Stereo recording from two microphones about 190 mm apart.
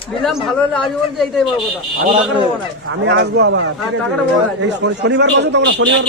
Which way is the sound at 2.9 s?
70° right (ahead or behind).